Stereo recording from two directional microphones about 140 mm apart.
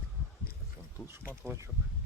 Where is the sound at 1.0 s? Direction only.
Centre (ahead or behind).